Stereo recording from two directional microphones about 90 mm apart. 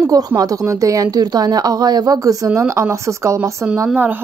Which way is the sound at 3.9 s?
20° right (ahead or behind).